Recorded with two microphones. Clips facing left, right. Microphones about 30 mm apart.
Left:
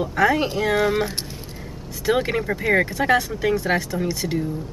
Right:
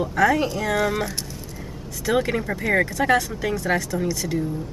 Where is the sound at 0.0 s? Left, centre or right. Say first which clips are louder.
Even; centre.